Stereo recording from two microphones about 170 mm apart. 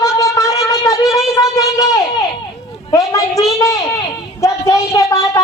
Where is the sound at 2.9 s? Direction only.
20° left (ahead or behind).